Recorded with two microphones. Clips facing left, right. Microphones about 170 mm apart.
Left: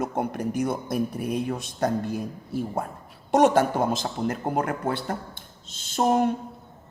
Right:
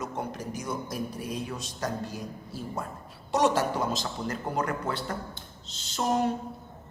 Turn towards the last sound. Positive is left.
turn(degrees=55)  # may be behind; listen again after turning